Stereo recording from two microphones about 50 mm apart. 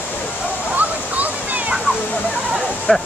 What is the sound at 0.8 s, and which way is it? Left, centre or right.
Waterfall, right.